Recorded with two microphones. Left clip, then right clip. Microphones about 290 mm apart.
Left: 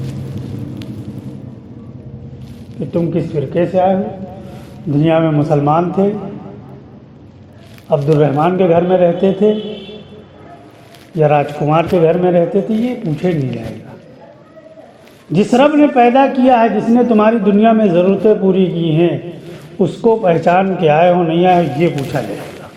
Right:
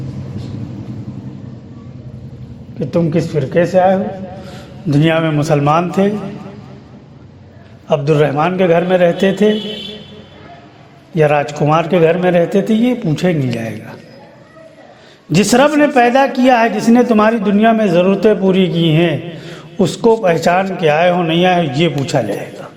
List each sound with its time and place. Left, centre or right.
2.9 s a man's voice: right
7.9 s a man's voice: right
11.2 s a man's voice: right
15.3 s a man's voice: right